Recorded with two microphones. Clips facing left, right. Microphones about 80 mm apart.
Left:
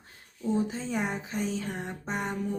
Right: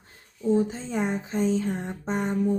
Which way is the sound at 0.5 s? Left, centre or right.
Right.